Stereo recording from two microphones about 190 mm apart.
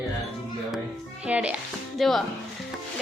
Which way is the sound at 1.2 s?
5° right (ahead or behind).